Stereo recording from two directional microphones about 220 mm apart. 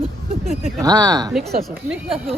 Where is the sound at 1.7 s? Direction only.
5° right (ahead or behind).